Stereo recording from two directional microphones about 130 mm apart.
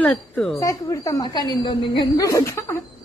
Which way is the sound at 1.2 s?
35° left (ahead or behind).